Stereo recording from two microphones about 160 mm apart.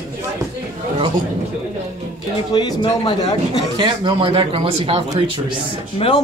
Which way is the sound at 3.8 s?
30° right (ahead or behind).